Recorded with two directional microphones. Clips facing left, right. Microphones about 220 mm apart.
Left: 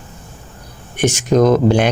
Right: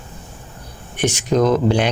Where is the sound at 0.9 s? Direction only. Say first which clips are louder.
Left 4 dB; 45° left (ahead or behind).